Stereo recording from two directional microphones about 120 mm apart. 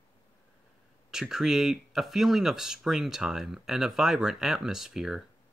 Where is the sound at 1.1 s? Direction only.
5° right (ahead or behind).